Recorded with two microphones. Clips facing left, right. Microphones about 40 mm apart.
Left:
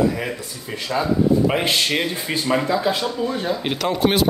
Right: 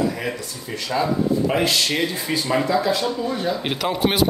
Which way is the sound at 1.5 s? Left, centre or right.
Left.